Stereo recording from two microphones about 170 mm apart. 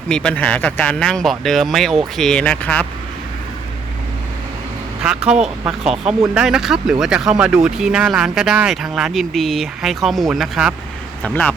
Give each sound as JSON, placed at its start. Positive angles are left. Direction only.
{"t": 0.1, "sound": "speech", "side_deg": 5}
{"t": 5.0, "sound": "speech", "side_deg": -5}
{"t": 11.2, "sound": "speech", "side_deg": 5}